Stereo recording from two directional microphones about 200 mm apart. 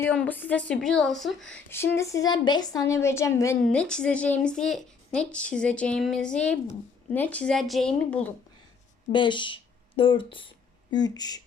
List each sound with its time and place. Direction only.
0.0 s speech: 10° left (ahead or behind)
2.0 s a woman's voice: 15° left (ahead or behind)
9.1 s speech: 25° left (ahead or behind)